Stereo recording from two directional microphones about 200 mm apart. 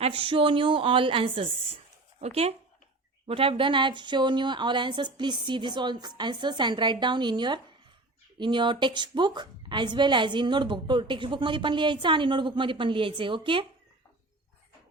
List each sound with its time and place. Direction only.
0.0 s a woman's voice: 25° right (ahead or behind)